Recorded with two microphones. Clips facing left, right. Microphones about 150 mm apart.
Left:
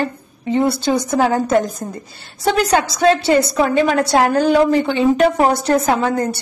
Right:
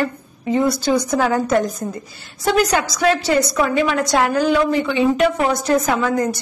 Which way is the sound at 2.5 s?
30° left (ahead or behind).